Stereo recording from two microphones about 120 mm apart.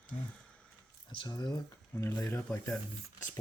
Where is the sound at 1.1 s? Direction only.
35° left (ahead or behind).